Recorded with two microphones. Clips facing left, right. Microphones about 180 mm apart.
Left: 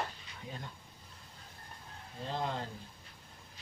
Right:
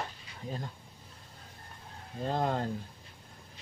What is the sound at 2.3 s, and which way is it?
Speech, 50° right (ahead or behind).